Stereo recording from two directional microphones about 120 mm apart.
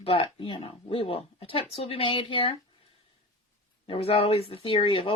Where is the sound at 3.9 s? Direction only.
55° left (ahead or behind).